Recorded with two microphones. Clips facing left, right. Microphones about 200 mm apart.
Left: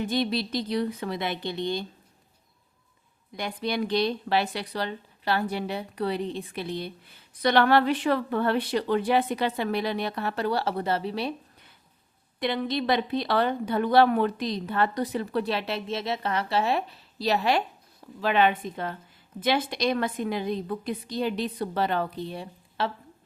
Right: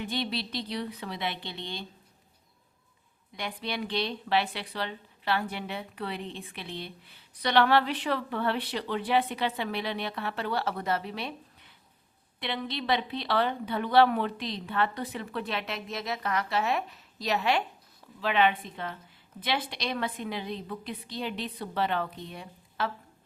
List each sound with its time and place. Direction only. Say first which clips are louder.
0.0 s a woman's voice: left 6 dB; 45° left (ahead or behind)
3.3 s a woman's voice: left 6 dB; 40° left (ahead or behind)
12.4 s a woman's voice: left 7 dB; 45° left (ahead or behind)